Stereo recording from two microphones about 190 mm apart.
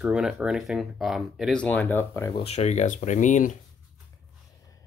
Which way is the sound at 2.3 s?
30° left (ahead or behind).